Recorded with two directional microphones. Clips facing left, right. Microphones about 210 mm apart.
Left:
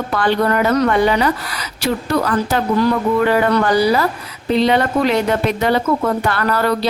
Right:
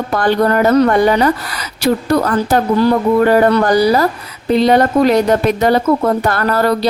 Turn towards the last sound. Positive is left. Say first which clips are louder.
# right 3 dB
turn(degrees=-40)  # may be behind; listen again after turning